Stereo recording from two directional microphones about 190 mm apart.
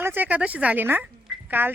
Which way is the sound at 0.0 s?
10° right (ahead or behind).